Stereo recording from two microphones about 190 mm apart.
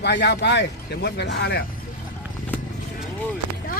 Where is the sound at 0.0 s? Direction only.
60° left (ahead or behind).